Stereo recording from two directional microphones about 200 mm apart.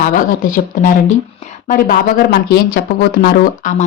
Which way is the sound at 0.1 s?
40° left (ahead or behind).